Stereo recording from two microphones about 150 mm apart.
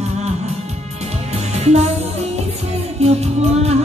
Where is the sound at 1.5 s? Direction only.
45° right (ahead or behind).